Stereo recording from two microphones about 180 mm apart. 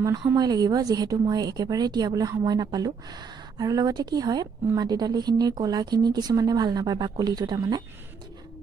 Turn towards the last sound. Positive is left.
turn(degrees=-20)  # may be behind; listen again after turning